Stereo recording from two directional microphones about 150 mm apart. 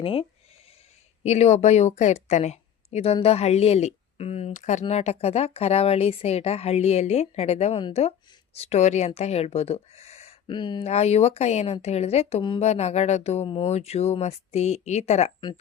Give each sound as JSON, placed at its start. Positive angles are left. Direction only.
{"t": 0.0, "sound": "speech", "side_deg": 40}
{"t": 10.5, "sound": "speech", "side_deg": 30}
{"t": 10.8, "sound": "speech", "side_deg": 45}